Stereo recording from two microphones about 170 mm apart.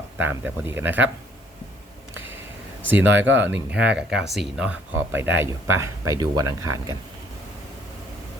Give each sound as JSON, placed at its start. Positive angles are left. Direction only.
{"t": 0.2, "sound": "speech", "side_deg": -10}
{"t": 3.1, "sound": "speech", "side_deg": -90}
{"t": 3.7, "sound": "speech", "side_deg": -5}